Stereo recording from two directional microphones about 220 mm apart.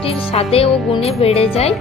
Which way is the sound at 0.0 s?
25° left (ahead or behind).